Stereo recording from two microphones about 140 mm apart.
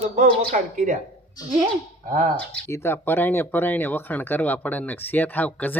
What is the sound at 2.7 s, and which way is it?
Speech, 20° left (ahead or behind).